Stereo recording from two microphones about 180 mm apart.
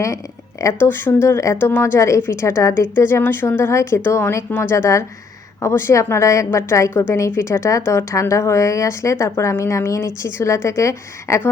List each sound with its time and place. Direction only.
0.6 s a woman's voice: 10° left (ahead or behind)